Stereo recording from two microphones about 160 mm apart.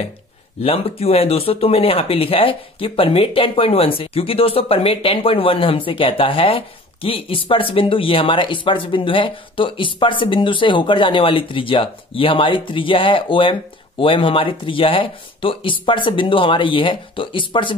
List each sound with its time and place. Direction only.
0.6 s speech: 35° left (ahead or behind)